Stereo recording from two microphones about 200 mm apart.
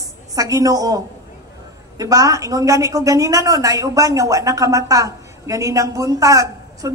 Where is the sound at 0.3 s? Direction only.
15° right (ahead or behind).